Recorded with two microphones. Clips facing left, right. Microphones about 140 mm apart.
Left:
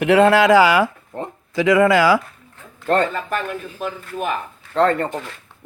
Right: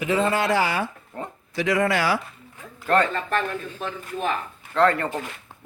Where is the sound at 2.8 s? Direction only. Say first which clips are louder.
Left 2 dB; 30° left (ahead or behind).